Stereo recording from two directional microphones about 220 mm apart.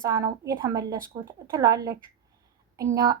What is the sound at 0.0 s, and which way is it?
A woman's voice, 15° right (ahead or behind).